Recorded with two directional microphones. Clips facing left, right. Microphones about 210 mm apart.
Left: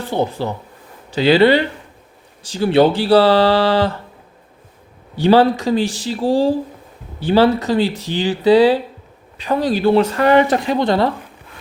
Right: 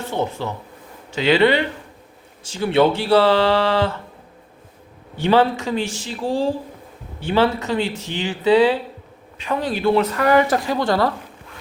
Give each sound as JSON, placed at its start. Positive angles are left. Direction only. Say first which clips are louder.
{"t": 0.0, "sound": "speech", "louder": "left 4 dB", "side_deg": 35}
{"t": 5.1, "sound": "speech", "louder": "left 4 dB", "side_deg": 35}